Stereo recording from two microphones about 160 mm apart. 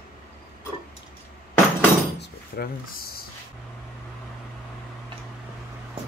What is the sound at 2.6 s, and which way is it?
Speech, 80° left.